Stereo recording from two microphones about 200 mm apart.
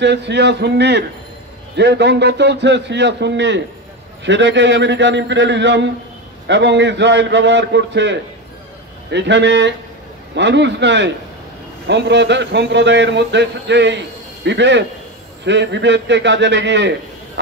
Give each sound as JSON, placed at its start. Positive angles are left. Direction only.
{"t": 0.0, "sound": "speech", "side_deg": -60}